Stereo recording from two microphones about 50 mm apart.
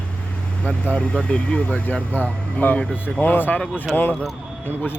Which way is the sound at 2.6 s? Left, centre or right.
Left.